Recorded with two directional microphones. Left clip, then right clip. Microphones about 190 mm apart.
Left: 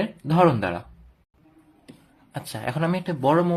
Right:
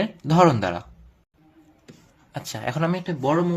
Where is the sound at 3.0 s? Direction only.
20° left (ahead or behind).